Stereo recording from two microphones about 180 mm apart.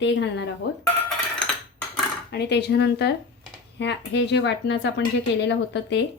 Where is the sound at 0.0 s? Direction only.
75° left (ahead or behind).